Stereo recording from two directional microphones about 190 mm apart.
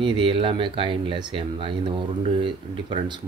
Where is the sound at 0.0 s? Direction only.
25° right (ahead or behind).